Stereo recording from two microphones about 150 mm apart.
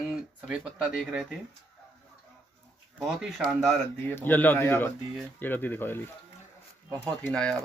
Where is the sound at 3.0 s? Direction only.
Centre (ahead or behind).